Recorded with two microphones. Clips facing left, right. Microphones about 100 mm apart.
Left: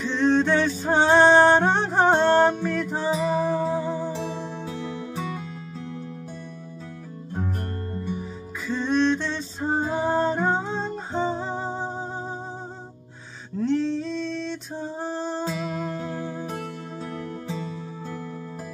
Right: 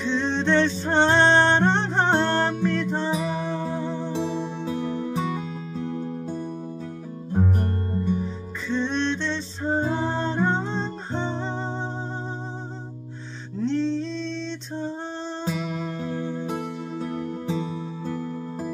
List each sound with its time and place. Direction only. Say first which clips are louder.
0.0 s music: left 3 dB; centre (ahead or behind)
5.9 s music: right 6 dB; 35° right (ahead or behind)
8.1 s music: right 5 dB; 5° left (ahead or behind)
13.6 s music: even; 5° left (ahead or behind)
16.4 s music: right 3 dB; 15° right (ahead or behind)